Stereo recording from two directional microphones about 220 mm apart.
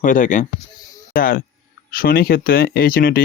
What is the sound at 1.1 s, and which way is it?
Speech, 40° left (ahead or behind).